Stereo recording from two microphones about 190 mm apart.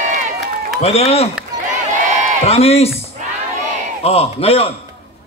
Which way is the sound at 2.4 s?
30° left (ahead or behind).